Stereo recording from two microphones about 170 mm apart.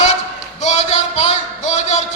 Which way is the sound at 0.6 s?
40° left (ahead or behind).